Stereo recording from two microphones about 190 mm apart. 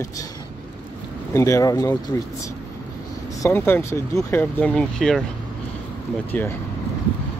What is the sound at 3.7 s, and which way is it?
Speech, 15° left (ahead or behind).